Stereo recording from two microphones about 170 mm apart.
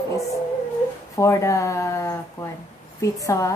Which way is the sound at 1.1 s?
20° left (ahead or behind).